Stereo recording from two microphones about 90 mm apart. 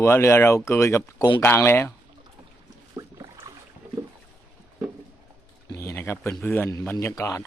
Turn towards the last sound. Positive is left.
turn(degrees=40)  # may be behind; listen again after turning